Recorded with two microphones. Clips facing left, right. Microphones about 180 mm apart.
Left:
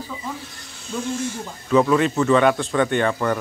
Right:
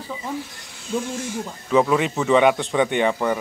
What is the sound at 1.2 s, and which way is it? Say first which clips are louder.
Speech: left 1 dB; 15° right (ahead or behind).